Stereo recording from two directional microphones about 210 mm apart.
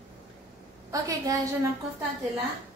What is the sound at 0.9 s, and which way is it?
Speech, 15° right (ahead or behind).